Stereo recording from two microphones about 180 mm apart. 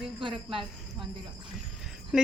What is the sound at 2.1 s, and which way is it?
Speech, 5° right (ahead or behind).